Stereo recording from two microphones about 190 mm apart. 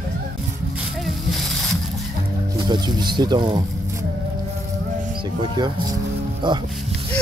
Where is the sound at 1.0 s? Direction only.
Centre (ahead or behind).